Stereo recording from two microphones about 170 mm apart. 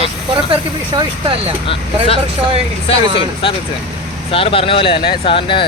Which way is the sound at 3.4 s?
35° left (ahead or behind).